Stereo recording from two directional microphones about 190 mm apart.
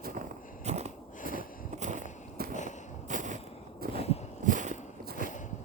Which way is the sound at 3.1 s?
40° right (ahead or behind).